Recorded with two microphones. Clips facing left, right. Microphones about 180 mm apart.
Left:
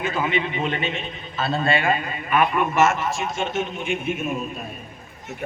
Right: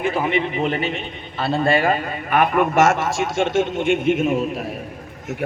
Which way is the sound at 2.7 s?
80° right.